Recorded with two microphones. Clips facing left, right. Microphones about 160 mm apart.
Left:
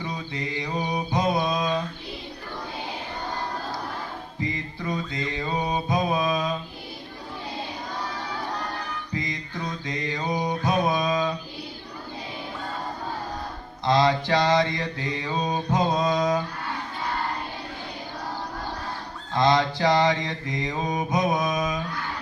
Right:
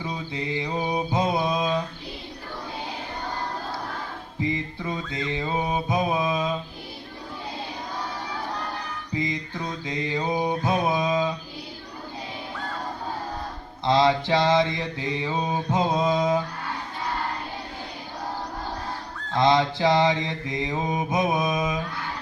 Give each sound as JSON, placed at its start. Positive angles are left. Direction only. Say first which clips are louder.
{"t": 0.0, "sound": "mantra", "louder": "right 1 dB", "side_deg": -15}
{"t": 4.4, "sound": "mantra", "louder": "right 4 dB", "side_deg": -20}
{"t": 9.1, "sound": "music", "louder": "right 4 dB", "side_deg": -20}
{"t": 9.8, "sound": "mantra", "louder": "right 4 dB", "side_deg": -20}
{"t": 13.8, "sound": "mantra", "louder": "right 1 dB", "side_deg": -20}
{"t": 19.3, "sound": "mantra", "louder": "right 1 dB", "side_deg": -20}